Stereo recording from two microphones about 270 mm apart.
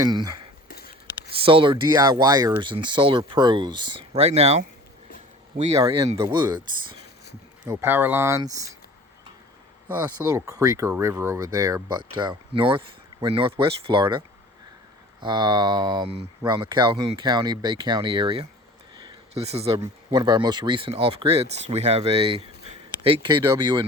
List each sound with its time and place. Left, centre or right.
0.0 s speech: centre
5.7 s speech: centre
9.9 s speech: centre
18.9 s a sound: centre
19.8 s speech: centre